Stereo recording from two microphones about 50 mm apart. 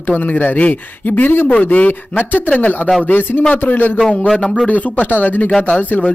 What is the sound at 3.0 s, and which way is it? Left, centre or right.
Speech, left.